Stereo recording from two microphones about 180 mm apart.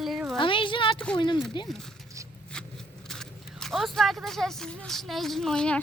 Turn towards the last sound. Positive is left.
turn(degrees=5)  # may be behind; listen again after turning